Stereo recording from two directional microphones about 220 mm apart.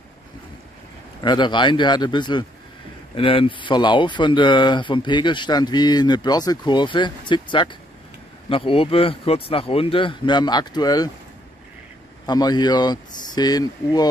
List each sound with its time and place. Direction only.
1.2 s speech: 20° left (ahead or behind)
12.3 s speech: 20° left (ahead or behind)